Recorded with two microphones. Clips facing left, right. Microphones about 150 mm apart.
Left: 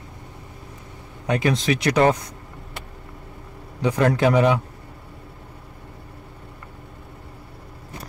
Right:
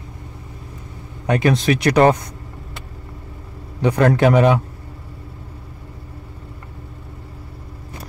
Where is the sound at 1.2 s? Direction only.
60° right (ahead or behind).